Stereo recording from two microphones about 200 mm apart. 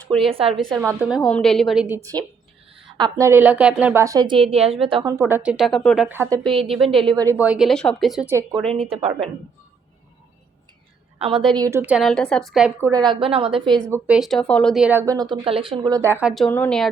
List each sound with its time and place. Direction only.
0.3 s a woman's voice: 30° right (ahead or behind)
0.8 s a woman's voice: 10° right (ahead or behind)
2.7 s speech: 20° right (ahead or behind); by 6.1 s centre (ahead or behind)
6.1 s speech: 10° right (ahead or behind)
6.9 s a woman's voice: 5° left (ahead or behind)
7.2 s a woman's voice: 10° right (ahead or behind)
8.3 s speech: 15° right (ahead or behind)
8.7 s a woman's voice: 30° right (ahead or behind)
11.2 s a woman's voice: 25° right (ahead or behind)
11.5 s a woman's voice: 15° right (ahead or behind)
12.8 s a woman's voice: 20° right (ahead or behind)
13.9 s speech: 5° right (ahead or behind)
16.2 s a woman's voice: centre (ahead or behind)